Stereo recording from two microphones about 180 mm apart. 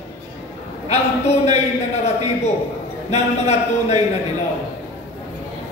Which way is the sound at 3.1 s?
40° left (ahead or behind).